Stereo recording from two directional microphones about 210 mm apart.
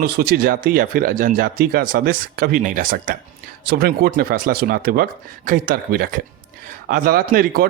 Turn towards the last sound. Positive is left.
turn(degrees=-45)  # may be behind; listen again after turning